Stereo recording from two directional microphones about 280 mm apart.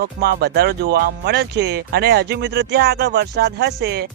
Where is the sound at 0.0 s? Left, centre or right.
Right.